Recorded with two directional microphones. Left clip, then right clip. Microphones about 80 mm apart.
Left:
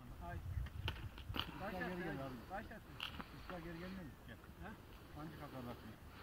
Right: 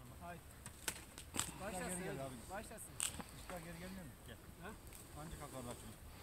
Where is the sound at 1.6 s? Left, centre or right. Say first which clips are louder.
Left 1 dB; right.